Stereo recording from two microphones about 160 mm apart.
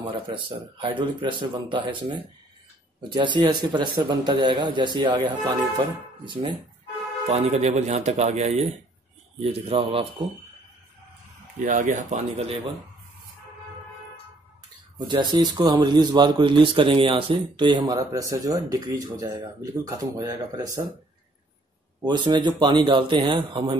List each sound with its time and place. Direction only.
0.0 s a man's voice: 30° right (ahead or behind)
7.2 s a man's voice: 45° right (ahead or behind)
11.6 s speech: 55° right (ahead or behind)
15.0 s speech: 25° right (ahead or behind)
22.0 s speech: 25° right (ahead or behind)